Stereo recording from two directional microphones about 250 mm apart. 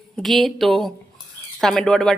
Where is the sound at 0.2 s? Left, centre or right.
Centre.